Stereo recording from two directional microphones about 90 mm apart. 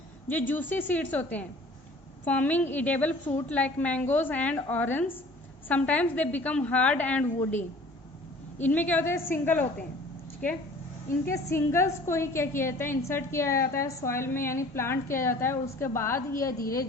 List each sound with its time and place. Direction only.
0.3 s a woman's voice: 20° left (ahead or behind)
8.5 s a woman's voice: 20° left (ahead or behind)
11.3 s a woman's voice: 30° left (ahead or behind)